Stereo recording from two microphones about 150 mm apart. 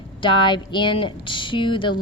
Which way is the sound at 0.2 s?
35° left (ahead or behind).